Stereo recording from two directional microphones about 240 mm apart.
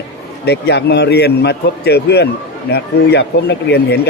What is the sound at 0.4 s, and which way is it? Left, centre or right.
A man's voice, left.